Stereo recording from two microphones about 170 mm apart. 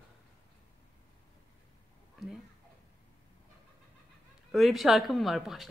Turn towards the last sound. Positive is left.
turn(degrees=0)  # may be behind; listen again after turning